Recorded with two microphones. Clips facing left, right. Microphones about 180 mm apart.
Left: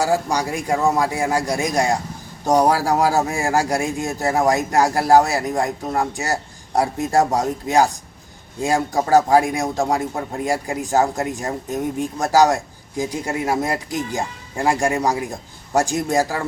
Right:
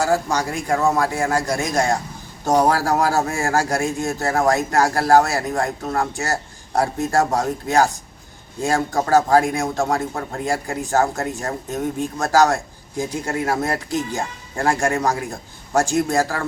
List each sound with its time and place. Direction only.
0.0 s speech: 15° left (ahead or behind)